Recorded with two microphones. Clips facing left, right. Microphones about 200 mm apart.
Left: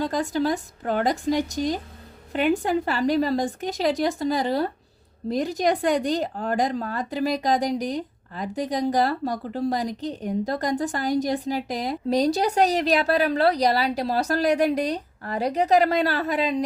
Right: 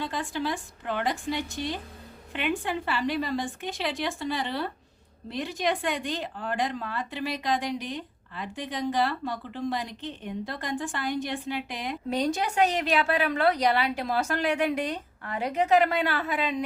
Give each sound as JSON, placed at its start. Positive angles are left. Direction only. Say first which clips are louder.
{"t": 0.0, "sound": "speech", "louder": "left 7 dB", "side_deg": 40}